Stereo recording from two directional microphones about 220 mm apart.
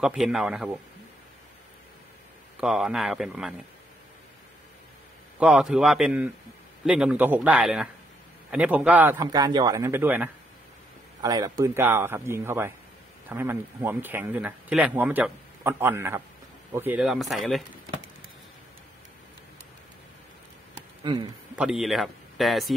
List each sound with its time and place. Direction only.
0.0 s a man's voice: centre (ahead or behind)
2.6 s a man's voice: centre (ahead or behind)
5.4 s a man's voice: 5° right (ahead or behind)
21.0 s speech: 20° right (ahead or behind)
21.5 s speech: 5° right (ahead or behind)